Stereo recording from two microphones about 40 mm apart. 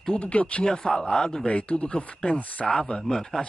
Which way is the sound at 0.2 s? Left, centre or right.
Left.